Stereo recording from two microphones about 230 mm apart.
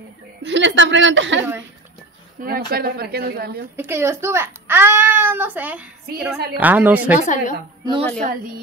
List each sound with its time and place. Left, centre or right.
0.4 s a woman's voice: right
2.4 s speech: right
3.7 s a child's voice: centre
7.2 s a woman's voice: left
8.2 s speech: right